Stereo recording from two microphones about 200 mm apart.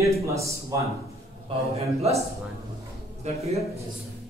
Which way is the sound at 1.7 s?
30° right (ahead or behind).